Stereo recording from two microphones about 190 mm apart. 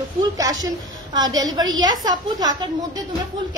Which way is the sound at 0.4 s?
20° right (ahead or behind).